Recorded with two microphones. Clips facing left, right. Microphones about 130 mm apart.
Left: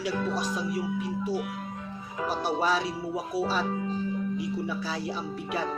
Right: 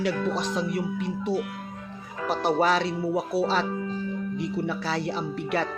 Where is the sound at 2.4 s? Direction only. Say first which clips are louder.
Right 5 dB; 75° right (ahead or behind).